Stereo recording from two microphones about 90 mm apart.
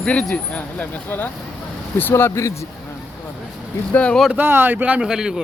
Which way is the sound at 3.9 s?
15° left (ahead or behind).